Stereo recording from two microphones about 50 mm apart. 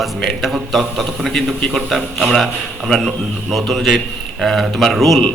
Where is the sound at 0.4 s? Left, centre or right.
Centre.